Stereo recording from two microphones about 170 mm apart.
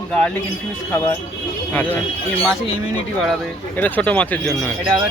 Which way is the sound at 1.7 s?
10° left (ahead or behind).